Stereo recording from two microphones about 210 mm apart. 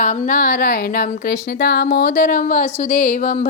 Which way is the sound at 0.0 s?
40° left (ahead or behind).